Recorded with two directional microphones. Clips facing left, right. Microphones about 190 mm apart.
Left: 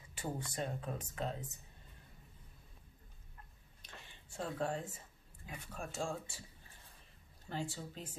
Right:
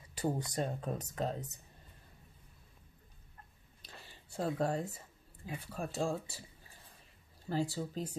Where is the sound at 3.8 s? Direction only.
35° right (ahead or behind).